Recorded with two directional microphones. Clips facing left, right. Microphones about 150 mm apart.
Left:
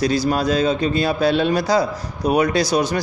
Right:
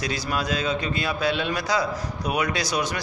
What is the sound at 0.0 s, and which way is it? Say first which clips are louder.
A man's voice: left 9 dB; 35° left (ahead or behind).